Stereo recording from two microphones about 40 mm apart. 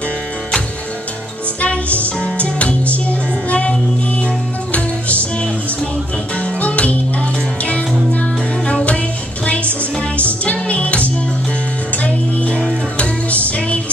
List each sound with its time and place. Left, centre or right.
1.6 s music: left
4.7 s music: left
6.6 s music: left
8.1 s music: left
10.4 s music: left